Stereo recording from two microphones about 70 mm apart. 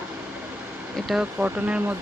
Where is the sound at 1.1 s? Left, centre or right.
Centre.